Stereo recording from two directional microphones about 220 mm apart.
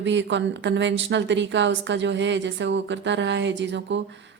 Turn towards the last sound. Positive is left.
turn(degrees=-55)  # may be behind; listen again after turning